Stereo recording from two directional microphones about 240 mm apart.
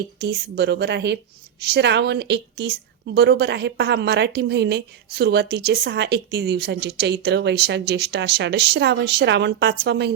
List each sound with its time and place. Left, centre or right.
0.2 s a woman's voice: right